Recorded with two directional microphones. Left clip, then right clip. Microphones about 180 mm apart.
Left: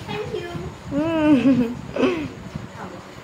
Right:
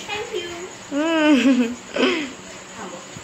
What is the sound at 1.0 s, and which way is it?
Speech, 5° left (ahead or behind).